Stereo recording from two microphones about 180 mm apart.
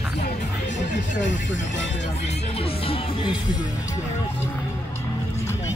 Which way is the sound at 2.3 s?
30° left (ahead or behind).